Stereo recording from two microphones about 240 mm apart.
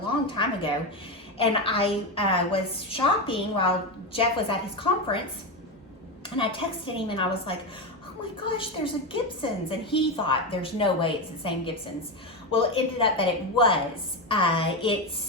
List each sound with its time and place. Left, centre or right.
0.3 s a woman's voice: left
6.3 s a woman's voice: left